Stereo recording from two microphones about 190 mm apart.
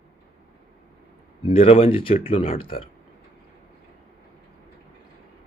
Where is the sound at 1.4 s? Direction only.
30° left (ahead or behind).